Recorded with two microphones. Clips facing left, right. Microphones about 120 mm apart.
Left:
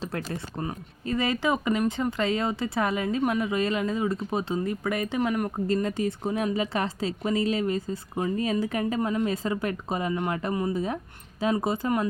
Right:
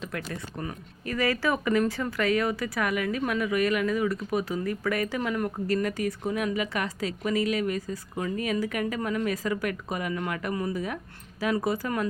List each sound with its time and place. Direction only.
0.0 s a woman's voice: 30° left (ahead or behind)